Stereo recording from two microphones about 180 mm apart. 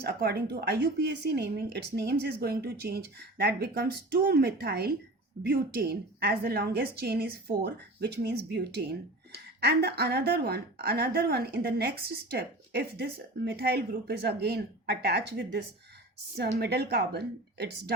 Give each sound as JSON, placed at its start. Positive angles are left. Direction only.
{"t": 0.0, "sound": "a woman's voice", "side_deg": -60}